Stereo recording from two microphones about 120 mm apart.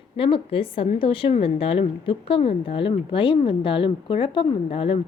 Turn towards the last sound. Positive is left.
turn(degrees=50)  # may be behind; listen again after turning